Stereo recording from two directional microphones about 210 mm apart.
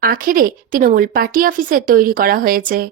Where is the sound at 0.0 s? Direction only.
40° right (ahead or behind).